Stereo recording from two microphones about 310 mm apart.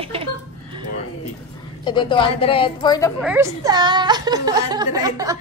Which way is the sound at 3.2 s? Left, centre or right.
Centre.